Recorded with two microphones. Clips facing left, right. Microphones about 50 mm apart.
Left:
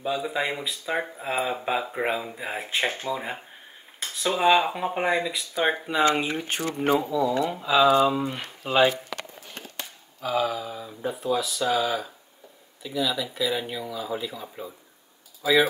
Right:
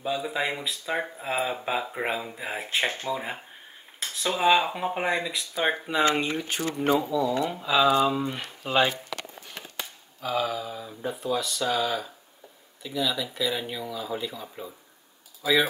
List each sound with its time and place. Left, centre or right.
0.0 s speech: centre
6.4 s speech: left
6.9 s speech: left
7.4 s speech: centre
10.2 s speech: centre